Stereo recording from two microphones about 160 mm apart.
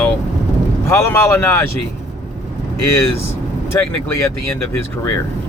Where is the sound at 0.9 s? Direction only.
15° left (ahead or behind).